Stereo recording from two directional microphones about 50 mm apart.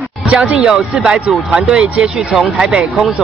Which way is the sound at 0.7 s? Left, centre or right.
Centre.